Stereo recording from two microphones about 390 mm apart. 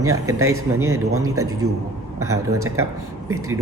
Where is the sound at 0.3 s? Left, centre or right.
Right.